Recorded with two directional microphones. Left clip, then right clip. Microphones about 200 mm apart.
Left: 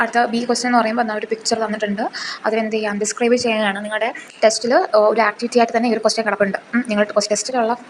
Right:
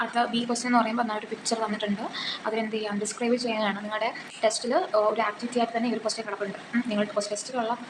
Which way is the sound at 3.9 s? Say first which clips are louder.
Left 8 dB; 20° left (ahead or behind).